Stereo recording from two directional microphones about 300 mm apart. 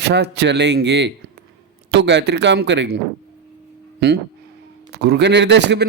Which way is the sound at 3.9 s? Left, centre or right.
Right.